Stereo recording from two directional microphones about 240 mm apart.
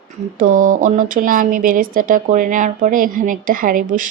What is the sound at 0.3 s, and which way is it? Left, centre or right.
Speech, right.